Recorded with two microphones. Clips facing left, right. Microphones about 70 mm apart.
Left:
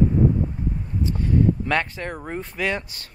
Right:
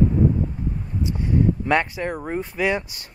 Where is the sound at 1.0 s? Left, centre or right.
Centre.